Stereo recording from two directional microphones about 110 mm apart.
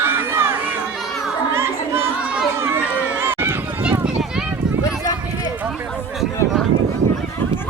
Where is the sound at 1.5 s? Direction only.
20° right (ahead or behind).